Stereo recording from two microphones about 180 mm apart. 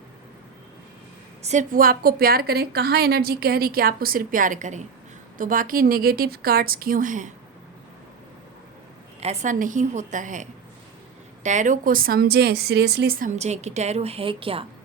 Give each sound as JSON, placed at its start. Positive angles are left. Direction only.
{"t": 1.4, "sound": "a woman's voice", "side_deg": -40}
{"t": 9.2, "sound": "speech", "side_deg": -40}